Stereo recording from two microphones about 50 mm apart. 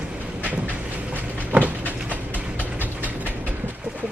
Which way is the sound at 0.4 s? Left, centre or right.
Right.